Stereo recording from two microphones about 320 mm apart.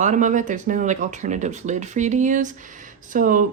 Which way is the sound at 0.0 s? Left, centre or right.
Right.